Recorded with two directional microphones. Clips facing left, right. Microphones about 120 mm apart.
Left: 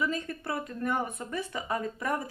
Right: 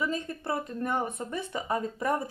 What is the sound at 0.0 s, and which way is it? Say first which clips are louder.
Speech: even; 25° right (ahead or behind).